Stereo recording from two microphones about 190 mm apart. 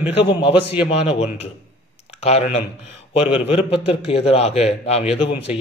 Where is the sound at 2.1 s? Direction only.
35° left (ahead or behind).